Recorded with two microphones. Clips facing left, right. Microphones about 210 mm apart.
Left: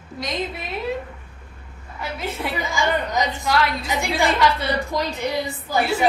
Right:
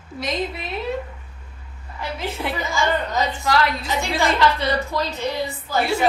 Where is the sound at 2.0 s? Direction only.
Centre (ahead or behind).